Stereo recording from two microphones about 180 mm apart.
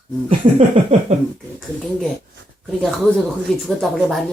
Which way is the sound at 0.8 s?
30° right (ahead or behind).